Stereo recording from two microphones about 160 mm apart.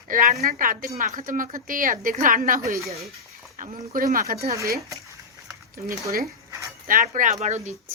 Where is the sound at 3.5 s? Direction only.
55° right (ahead or behind).